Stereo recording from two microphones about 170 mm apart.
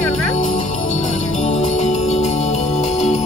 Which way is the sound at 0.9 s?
45° left (ahead or behind).